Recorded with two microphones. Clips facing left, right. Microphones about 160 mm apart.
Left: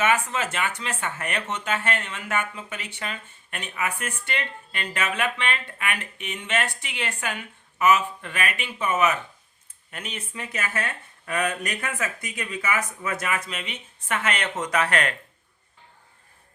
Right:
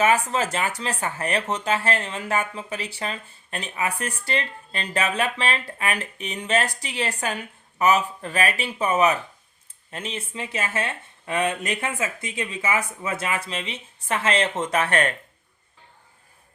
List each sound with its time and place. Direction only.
0.0 s speech: 35° right (ahead or behind)